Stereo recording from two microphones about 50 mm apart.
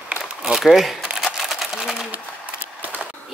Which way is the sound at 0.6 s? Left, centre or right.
Centre.